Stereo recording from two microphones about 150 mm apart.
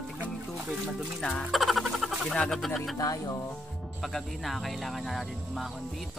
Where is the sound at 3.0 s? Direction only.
25° left (ahead or behind).